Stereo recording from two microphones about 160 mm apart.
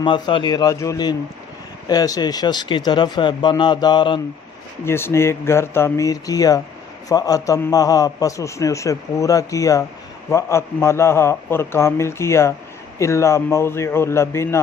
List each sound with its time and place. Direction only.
0.0 s a man's voice: 30° left (ahead or behind)
4.9 s a man's voice: 15° left (ahead or behind)